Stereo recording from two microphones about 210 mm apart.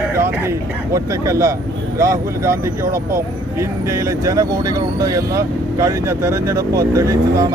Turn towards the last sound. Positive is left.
turn(degrees=-15)  # may be behind; listen again after turning